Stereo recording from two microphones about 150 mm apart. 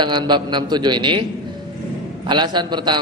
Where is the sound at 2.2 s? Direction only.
30° right (ahead or behind).